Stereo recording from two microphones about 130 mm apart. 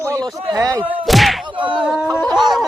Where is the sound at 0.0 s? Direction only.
25° right (ahead or behind).